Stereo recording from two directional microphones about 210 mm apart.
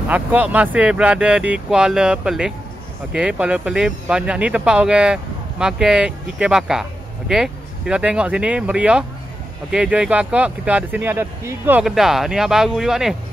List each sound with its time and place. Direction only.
0.1 s speech: 10° right (ahead or behind)